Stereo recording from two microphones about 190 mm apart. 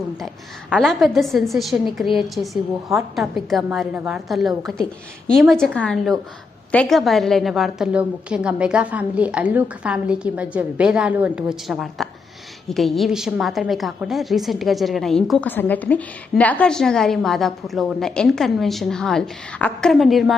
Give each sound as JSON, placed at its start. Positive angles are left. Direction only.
{"t": 0.7, "sound": "a woman's voice", "side_deg": 0}